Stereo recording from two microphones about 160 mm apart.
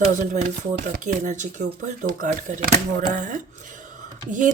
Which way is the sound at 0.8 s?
55° right (ahead or behind).